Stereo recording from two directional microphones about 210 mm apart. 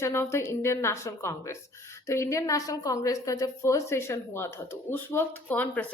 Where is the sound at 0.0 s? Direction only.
10° left (ahead or behind).